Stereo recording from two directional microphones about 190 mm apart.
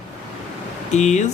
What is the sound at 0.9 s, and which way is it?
Speech, 40° left (ahead or behind).